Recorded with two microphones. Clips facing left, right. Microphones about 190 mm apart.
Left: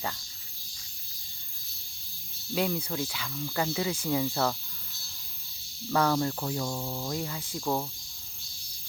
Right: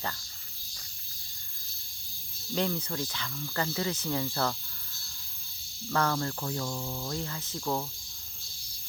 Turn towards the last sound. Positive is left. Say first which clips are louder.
# left 2 dB
turn(degrees=10)  # may be behind; listen again after turning